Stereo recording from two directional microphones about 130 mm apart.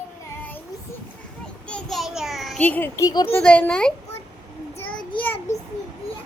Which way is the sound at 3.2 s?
15° left (ahead or behind).